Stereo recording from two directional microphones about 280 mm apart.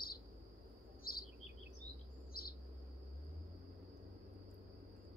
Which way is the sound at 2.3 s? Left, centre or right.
Left.